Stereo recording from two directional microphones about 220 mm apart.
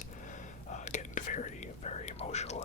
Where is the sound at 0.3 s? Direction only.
35° left (ahead or behind).